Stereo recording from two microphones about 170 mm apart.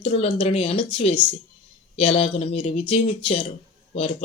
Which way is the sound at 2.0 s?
35° left (ahead or behind).